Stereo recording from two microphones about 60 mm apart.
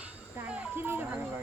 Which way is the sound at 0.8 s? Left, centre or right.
Right.